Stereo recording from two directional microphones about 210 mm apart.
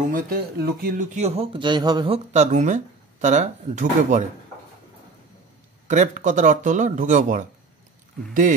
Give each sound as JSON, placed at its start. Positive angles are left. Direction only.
{"t": 0.1, "sound": "speech", "side_deg": -45}
{"t": 5.9, "sound": "speech", "side_deg": -35}